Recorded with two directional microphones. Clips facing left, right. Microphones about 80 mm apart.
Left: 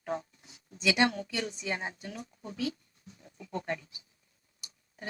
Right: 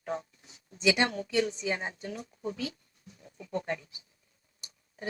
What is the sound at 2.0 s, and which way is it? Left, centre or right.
Speech, right.